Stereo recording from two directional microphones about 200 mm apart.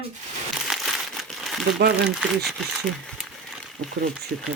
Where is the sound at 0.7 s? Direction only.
Centre (ahead or behind).